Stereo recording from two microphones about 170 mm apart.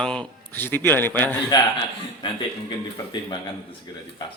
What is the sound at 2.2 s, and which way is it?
Speech, 25° left (ahead or behind).